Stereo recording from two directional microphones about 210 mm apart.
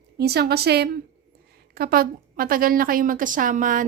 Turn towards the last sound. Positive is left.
turn(degrees=-40)  # may be behind; listen again after turning